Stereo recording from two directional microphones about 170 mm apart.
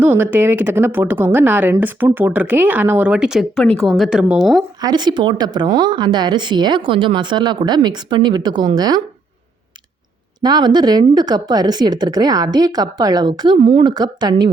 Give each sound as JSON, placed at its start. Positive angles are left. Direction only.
{"t": 0.0, "sound": "speech", "side_deg": -10}
{"t": 4.5, "sound": "a woman's voice", "side_deg": -25}
{"t": 10.4, "sound": "a woman's voice", "side_deg": -25}